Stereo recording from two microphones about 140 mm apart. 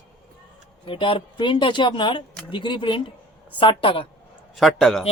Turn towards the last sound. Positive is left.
turn(degrees=0)  # may be behind; listen again after turning